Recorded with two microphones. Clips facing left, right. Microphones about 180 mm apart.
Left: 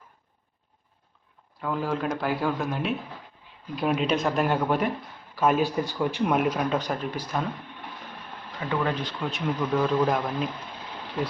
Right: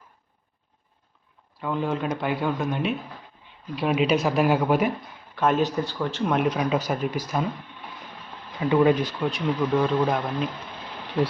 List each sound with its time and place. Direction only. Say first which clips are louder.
1.6 s speech: right 1 dB; centre (ahead or behind)
5.3 s speech: right 1 dB; 5° left (ahead or behind)
8.7 s speech: right 8 dB; 15° right (ahead or behind)